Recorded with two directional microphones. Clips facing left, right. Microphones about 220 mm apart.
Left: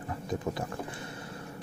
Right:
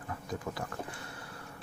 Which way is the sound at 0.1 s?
25° left (ahead or behind).